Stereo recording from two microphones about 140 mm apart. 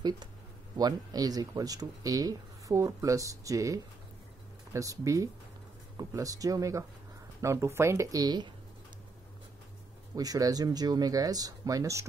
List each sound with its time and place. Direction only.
0.7 s speech: 30° right (ahead or behind)
10.1 s speech: 25° right (ahead or behind)